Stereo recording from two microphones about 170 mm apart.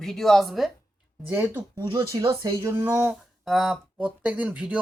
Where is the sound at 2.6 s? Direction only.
15° right (ahead or behind).